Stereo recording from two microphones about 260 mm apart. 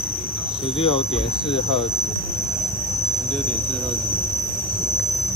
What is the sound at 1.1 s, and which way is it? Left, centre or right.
Speech, left.